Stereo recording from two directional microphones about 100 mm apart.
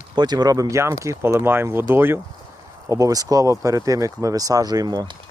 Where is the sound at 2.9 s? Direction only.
35° right (ahead or behind).